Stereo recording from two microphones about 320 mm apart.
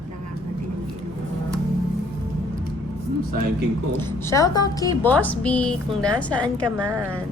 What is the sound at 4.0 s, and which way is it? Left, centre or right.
A woman's voice, centre.